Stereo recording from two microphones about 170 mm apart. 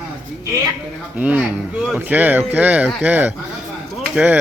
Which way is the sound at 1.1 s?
10° right (ahead or behind).